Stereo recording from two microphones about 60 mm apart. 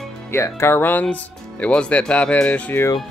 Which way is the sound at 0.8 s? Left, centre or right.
Left.